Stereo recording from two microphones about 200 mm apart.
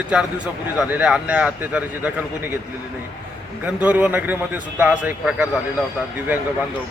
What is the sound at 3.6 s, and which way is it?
A man's voice, 5° right (ahead or behind).